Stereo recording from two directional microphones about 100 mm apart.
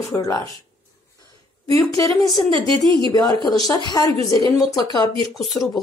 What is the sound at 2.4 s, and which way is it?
Speech, 60° right (ahead or behind).